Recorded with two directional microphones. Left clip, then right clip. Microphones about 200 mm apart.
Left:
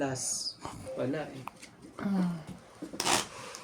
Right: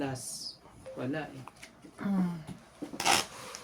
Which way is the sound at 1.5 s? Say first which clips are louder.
Left 6 dB; 30° left (ahead or behind).